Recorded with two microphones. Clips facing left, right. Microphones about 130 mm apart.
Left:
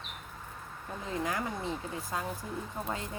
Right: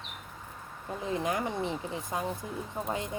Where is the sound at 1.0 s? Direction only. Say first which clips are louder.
Right 3 dB; 20° right (ahead or behind).